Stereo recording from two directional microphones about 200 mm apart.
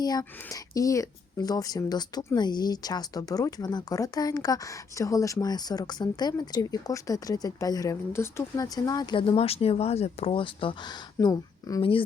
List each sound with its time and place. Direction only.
0.0 s speech: 20° left (ahead or behind)